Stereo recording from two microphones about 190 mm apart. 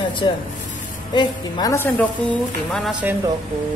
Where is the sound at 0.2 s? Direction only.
25° left (ahead or behind); by 3.2 s 5° right (ahead or behind).